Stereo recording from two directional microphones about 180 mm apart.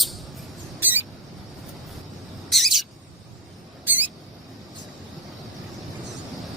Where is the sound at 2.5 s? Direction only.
Centre (ahead or behind).